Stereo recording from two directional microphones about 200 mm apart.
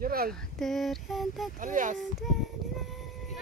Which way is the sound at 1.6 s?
40° right (ahead or behind).